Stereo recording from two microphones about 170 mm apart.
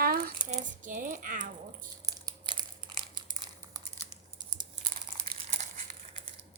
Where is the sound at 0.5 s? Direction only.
50° right (ahead or behind).